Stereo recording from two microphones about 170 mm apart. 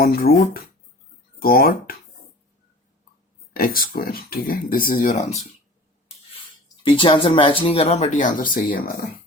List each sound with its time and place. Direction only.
0.0 s speech: 60° left (ahead or behind)
3.5 s speech: 60° left (ahead or behind)
6.8 s speech: 30° left (ahead or behind); by 8.8 s 55° left (ahead or behind)